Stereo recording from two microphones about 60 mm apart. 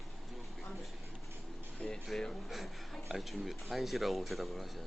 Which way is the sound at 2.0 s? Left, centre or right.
Centre.